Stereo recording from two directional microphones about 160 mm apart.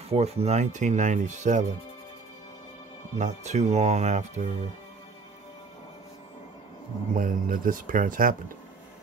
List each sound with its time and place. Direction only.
0.1 s speech: 40° right (ahead or behind)
3.2 s speech: 45° right (ahead or behind)
7.2 s speech: 60° right (ahead or behind)